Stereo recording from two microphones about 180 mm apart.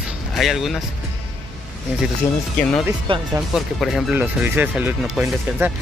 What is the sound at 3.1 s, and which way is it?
Speech, 30° right (ahead or behind).